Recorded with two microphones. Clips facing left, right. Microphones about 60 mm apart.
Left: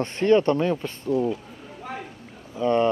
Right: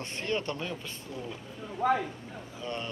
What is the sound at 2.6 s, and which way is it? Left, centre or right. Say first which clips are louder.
Speech: left 17 dB; left.